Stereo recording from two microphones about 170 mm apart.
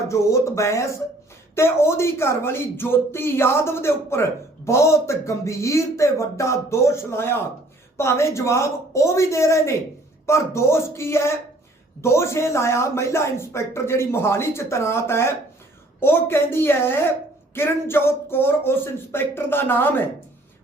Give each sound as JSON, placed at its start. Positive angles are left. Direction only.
{"t": 0.1, "sound": "speech", "side_deg": 15}